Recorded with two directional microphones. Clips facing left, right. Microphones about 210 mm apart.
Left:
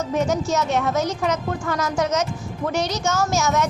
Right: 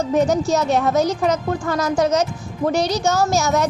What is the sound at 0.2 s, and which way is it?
A woman's voice, 35° right (ahead or behind).